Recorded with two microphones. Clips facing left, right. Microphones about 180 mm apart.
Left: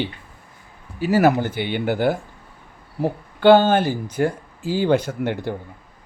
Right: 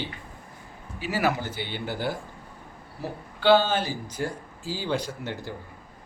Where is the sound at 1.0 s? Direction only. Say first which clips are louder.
Left 9 dB; 45° left (ahead or behind).